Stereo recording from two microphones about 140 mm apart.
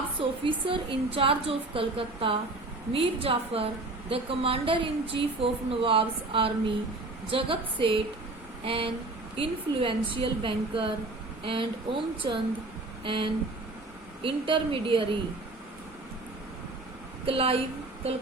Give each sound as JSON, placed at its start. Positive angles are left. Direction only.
{"t": 0.2, "sound": "a woman's voice", "side_deg": -40}
{"t": 17.2, "sound": "a woman's voice", "side_deg": -40}